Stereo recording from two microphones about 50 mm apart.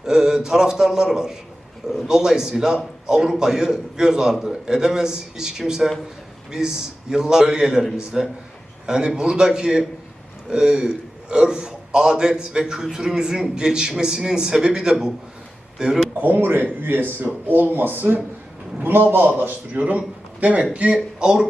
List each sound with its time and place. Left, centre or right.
0.0 s a man's voice: centre
16.2 s a man's voice: right
20.9 s a man's voice: centre